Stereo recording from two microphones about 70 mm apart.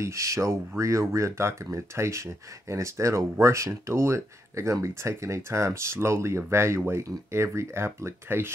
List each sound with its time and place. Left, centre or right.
0.0 s speech: right